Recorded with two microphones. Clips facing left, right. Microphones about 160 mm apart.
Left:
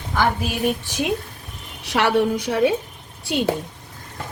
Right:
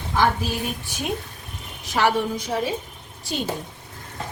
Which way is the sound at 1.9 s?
65° left (ahead or behind).